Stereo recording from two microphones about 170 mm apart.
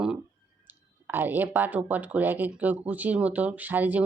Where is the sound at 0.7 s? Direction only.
10° right (ahead or behind).